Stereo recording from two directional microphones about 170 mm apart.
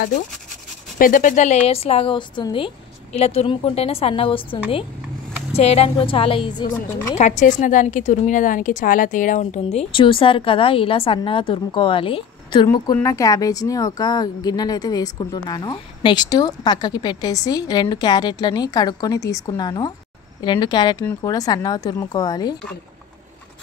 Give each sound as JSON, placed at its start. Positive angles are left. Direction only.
{"t": 0.9, "sound": "a woman's voice", "side_deg": 50}
{"t": 7.2, "sound": "a woman's voice", "side_deg": 45}